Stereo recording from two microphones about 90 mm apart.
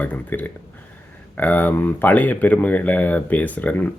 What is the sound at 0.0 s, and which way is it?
Speech, 20° left (ahead or behind).